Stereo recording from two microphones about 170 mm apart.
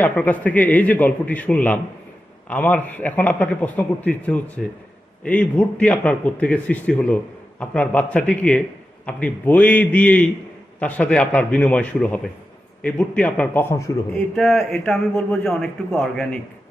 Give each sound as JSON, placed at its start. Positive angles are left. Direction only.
{"t": 0.0, "sound": "a man's voice", "side_deg": 10}
{"t": 14.3, "sound": "a man's voice", "side_deg": 0}